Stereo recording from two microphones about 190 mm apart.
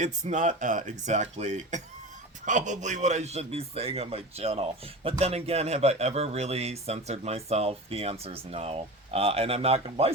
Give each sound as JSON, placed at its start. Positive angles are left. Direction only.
{"t": 0.0, "sound": "a man's voice", "side_deg": -40}